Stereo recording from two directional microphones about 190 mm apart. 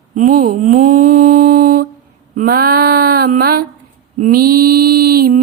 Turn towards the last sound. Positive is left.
turn(degrees=-50)  # may be behind; listen again after turning